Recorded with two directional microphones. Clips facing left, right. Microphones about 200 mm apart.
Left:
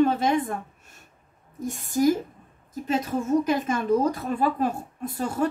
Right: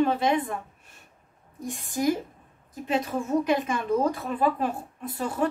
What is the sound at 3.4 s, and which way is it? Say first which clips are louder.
A woman's voice: left 2 dB; 40° left (ahead or behind).